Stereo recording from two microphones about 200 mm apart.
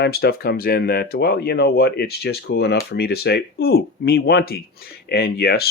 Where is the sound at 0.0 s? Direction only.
50° left (ahead or behind).